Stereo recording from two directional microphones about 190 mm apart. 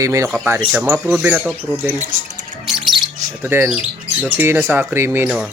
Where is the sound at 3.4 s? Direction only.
10° right (ahead or behind).